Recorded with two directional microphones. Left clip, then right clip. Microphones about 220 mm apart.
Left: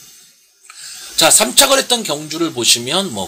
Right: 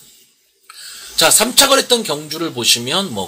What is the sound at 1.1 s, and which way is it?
Speech, 15° left (ahead or behind).